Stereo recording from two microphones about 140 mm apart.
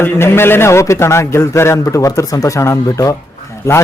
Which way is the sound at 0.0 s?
15° left (ahead or behind).